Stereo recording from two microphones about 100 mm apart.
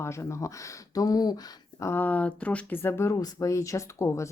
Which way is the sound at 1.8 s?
20° left (ahead or behind).